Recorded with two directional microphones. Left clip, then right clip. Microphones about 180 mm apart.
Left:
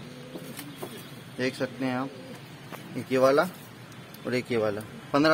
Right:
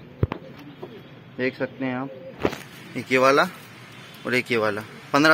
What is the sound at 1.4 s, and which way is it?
Speech, centre (ahead or behind).